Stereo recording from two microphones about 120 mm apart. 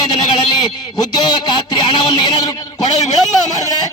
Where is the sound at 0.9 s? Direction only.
35° left (ahead or behind).